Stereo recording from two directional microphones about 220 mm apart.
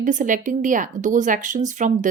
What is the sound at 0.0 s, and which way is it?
Speech, 35° right (ahead or behind).